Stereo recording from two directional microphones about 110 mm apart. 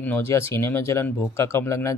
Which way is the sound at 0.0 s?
15° left (ahead or behind).